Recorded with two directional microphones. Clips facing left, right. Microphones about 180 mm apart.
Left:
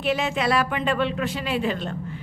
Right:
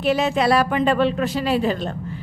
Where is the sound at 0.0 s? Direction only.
40° right (ahead or behind).